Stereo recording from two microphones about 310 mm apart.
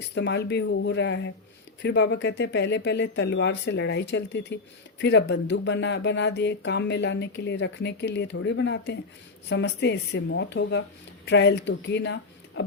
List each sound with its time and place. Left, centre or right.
0.1 s speech: left